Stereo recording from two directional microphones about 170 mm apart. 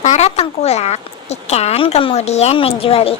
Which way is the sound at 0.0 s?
40° left (ahead or behind).